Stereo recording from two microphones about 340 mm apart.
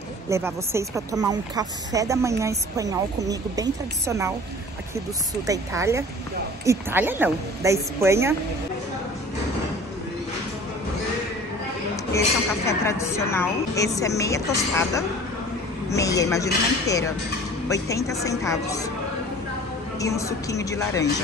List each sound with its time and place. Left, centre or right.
0.3 s speech: centre
5.5 s speech: centre
12.6 s a woman's voice: centre
20.0 s a woman's voice: centre